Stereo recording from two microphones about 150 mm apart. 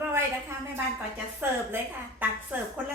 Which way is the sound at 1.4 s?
15° right (ahead or behind).